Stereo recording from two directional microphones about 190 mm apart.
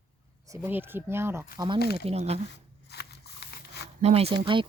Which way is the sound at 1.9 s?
35° right (ahead or behind).